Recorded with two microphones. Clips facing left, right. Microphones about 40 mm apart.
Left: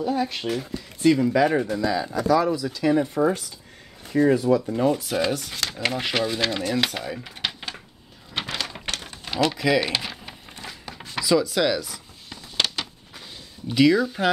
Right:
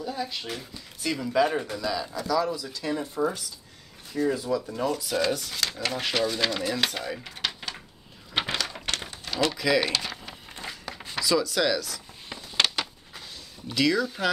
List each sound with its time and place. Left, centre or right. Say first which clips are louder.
0.0 s speech: left 7 dB; left
1.3 s speech: left 4 dB; left
4.1 s speech: left 7 dB; left
4.7 s speech: left 6 dB; left
5.3 s speech: left 1 dB; centre
8.6 s a sound: even; centre
9.5 s speech: left 2 dB; centre
9.9 s a sound: left 2 dB; centre
10.9 s speech: left 4 dB; centre
12.3 s a sound: even; right
13.7 s speech: left 6 dB; centre